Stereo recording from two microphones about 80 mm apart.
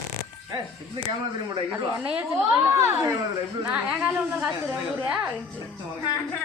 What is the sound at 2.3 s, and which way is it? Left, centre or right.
Speech, right.